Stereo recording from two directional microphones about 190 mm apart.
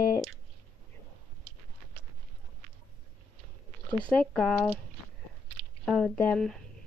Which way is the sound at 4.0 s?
5° left (ahead or behind).